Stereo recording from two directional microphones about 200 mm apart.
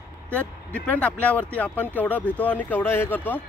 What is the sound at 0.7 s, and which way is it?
Speech, 5° left (ahead or behind).